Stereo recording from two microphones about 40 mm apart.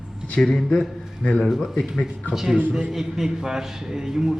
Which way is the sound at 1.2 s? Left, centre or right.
Left.